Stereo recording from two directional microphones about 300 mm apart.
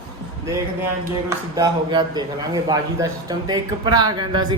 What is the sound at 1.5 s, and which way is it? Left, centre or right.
A man's voice, centre.